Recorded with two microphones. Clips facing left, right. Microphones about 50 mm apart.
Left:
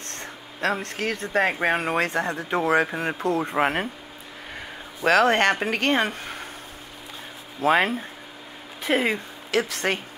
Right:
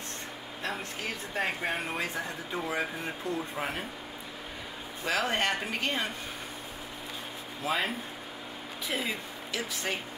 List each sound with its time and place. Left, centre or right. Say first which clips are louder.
0.1 s speech: left 2 dB; left
5.0 s speech: left 11 dB; left
7.6 s speech: left 11 dB; left